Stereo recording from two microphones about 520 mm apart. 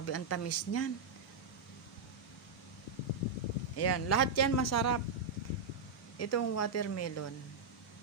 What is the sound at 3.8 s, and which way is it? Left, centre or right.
Speech, left.